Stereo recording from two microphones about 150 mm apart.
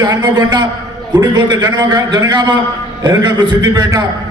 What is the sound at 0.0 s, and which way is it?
A man's voice, 30° right (ahead or behind).